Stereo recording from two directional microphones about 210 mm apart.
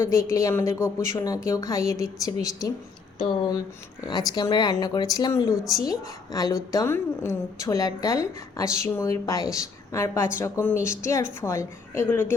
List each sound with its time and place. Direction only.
0.0 s a woman's voice: 15° left (ahead or behind)
4.1 s a woman's voice: 20° left (ahead or behind)